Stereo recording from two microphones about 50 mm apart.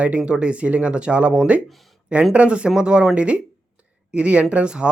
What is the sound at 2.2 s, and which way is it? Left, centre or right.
Speech, centre.